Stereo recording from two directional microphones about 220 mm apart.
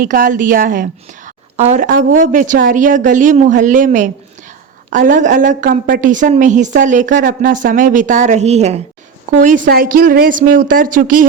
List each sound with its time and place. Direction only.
0.0 s a woman's voice: 40° right (ahead or behind)